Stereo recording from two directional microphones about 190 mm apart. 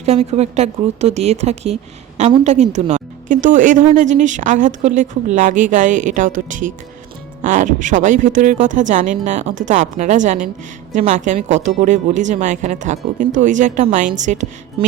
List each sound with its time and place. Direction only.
0.0 s speech: 35° right (ahead or behind)